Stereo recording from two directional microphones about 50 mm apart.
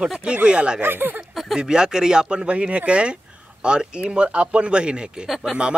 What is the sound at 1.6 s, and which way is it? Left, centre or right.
Speech, centre.